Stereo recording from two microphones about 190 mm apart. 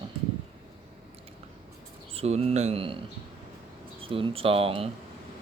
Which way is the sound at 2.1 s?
35° right (ahead or behind).